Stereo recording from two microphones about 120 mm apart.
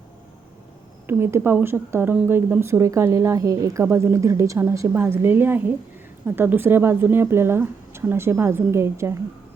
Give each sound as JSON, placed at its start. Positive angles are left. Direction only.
{"t": 1.0, "sound": "a woman's voice", "side_deg": -20}